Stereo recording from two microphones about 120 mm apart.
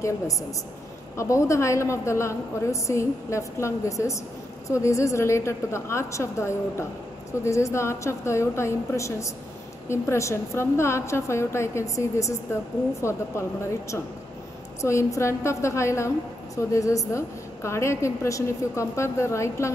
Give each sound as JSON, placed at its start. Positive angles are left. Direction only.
{"t": 1.1, "sound": "a woman's voice", "side_deg": 25}